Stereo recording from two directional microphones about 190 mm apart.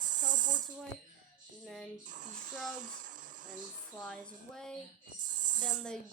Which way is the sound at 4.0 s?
5° left (ahead or behind).